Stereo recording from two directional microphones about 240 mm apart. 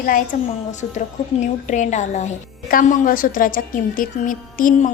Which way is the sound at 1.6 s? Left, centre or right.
Left.